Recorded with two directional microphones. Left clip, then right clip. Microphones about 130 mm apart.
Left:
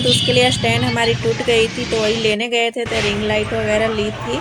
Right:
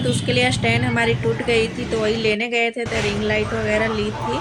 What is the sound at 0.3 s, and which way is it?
A woman's voice, 30° left (ahead or behind).